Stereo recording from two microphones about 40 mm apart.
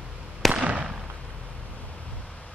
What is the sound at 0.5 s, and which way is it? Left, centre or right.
Fireworks, right.